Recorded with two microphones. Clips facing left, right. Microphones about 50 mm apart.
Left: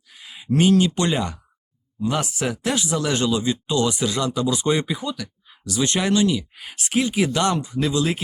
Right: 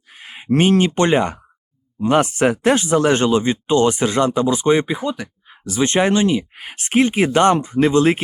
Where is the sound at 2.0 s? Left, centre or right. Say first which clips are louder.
Right 8 dB; right.